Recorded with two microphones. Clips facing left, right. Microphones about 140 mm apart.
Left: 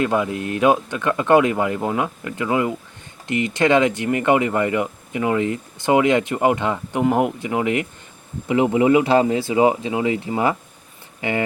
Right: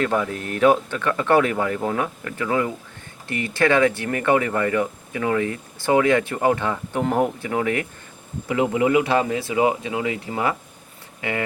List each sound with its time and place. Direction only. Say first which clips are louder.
0.0 s speech: left 2 dB; 15° left (ahead or behind)